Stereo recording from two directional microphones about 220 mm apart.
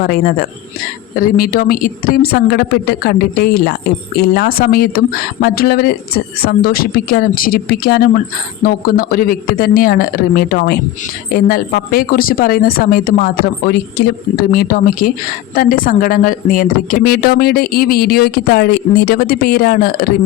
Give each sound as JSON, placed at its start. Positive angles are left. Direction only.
{"t": 0.0, "sound": "speech", "side_deg": 40}